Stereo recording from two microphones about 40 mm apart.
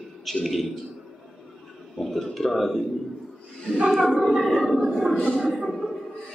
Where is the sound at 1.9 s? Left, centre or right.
Centre.